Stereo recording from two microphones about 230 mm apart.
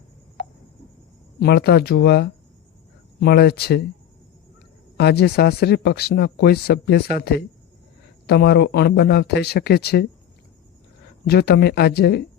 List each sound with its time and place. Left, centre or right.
1.4 s speech: left
4.9 s speech: left
11.3 s speech: left